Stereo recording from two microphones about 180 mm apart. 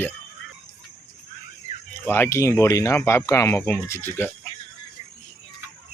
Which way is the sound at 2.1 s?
15° left (ahead or behind).